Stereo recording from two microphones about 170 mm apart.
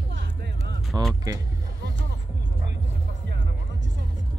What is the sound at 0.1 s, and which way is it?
Music, 80° right.